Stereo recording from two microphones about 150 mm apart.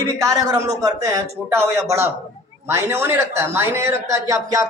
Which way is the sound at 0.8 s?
20° right (ahead or behind).